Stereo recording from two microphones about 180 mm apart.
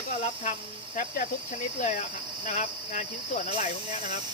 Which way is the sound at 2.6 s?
40° left (ahead or behind).